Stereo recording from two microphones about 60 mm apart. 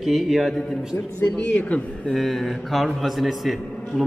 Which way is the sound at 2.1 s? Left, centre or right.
Centre.